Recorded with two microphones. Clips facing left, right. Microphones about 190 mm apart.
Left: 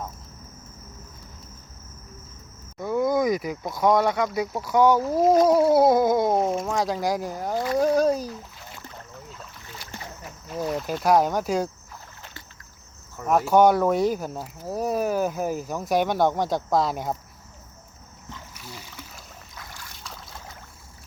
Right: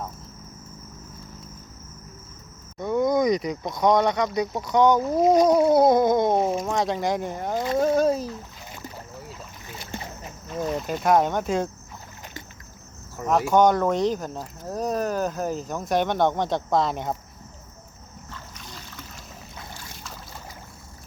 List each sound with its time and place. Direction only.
2.7 s speech: 5° left (ahead or behind)
7.5 s speech: 20° right (ahead or behind)
7.8 s speech: centre (ahead or behind)
9.7 s boat: 20° right (ahead or behind)
10.5 s speech: centre (ahead or behind)
13.5 s speech: 5° left (ahead or behind)
18.3 s splash: 10° left (ahead or behind)